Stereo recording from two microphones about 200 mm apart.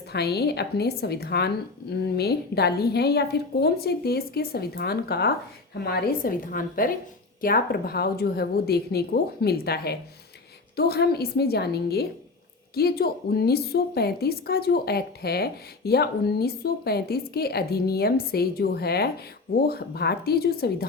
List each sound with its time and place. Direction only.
0.1 s a woman's voice: 55° left (ahead or behind)